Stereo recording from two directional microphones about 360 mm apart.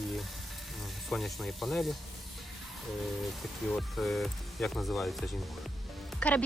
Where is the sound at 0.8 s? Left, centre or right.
Centre.